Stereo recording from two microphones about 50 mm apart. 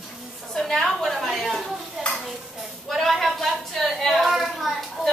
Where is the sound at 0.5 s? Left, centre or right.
Centre.